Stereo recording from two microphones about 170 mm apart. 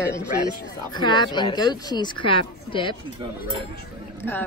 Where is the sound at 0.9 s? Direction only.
25° left (ahead or behind).